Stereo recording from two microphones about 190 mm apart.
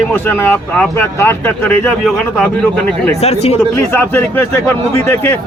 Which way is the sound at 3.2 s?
35° left (ahead or behind).